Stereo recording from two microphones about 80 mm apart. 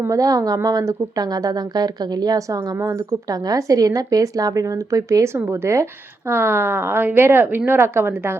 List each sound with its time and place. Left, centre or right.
0.1 s a woman's voice: right
2.7 s speech: right
3.2 s a woman's voice: right